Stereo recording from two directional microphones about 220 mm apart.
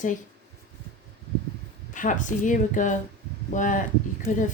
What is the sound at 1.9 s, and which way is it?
A woman's voice, 35° left (ahead or behind).